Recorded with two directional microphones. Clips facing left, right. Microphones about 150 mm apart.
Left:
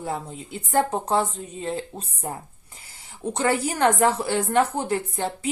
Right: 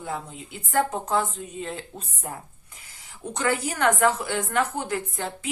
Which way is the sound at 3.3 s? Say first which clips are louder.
Left 2 dB; 30° left (ahead or behind).